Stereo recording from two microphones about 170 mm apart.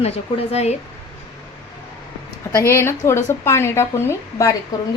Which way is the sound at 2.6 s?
15° left (ahead or behind).